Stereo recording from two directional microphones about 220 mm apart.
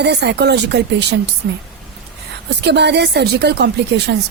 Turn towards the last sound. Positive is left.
turn(degrees=-50)  # may be behind; listen again after turning